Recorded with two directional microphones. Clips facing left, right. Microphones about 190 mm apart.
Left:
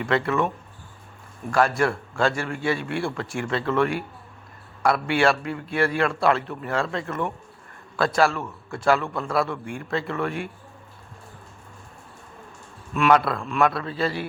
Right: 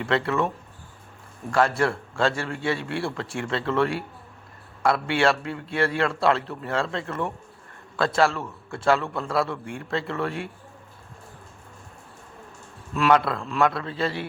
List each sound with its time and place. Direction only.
0.0 s a man's voice: 25° right (ahead or behind)
12.9 s a man's voice: 25° right (ahead or behind)